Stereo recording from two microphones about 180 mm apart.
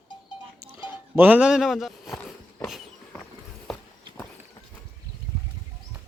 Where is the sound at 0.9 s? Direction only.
10° right (ahead or behind).